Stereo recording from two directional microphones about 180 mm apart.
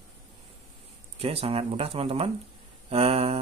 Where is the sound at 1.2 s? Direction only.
30° right (ahead or behind).